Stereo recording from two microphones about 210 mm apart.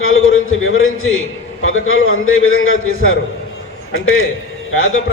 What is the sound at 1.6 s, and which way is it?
A man's voice, 75° left (ahead or behind).